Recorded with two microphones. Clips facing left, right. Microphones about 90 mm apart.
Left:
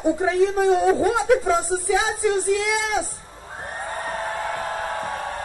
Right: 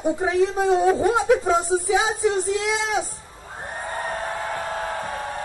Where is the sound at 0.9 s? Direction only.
15° right (ahead or behind).